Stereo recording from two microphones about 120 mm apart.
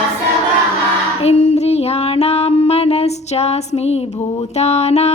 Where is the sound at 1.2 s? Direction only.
60° left (ahead or behind).